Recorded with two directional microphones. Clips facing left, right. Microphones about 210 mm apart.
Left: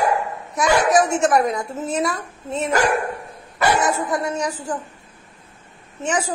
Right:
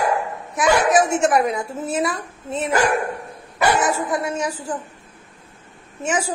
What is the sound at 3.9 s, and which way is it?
Speech, 5° right (ahead or behind).